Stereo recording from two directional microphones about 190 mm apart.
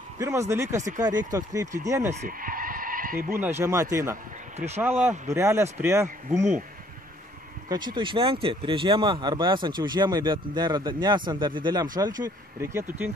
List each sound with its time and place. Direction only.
0.2 s speech: 15° right (ahead or behind)
0.7 s speech: 40° right (ahead or behind)
1.0 s speech: 20° right (ahead or behind)
2.1 s skidding: 45° right (ahead or behind)
3.3 s speech: 10° right (ahead or behind)
5.3 s speech: 15° right (ahead or behind)
7.7 s speech: 25° right (ahead or behind)